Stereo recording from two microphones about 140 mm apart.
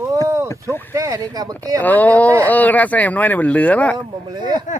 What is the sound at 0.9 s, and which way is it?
Speech, 20° right (ahead or behind).